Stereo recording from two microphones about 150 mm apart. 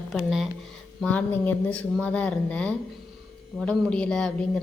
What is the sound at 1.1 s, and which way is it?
A woman's voice, 10° left (ahead or behind).